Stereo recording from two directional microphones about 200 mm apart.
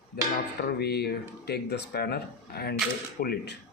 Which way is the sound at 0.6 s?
50° left (ahead or behind).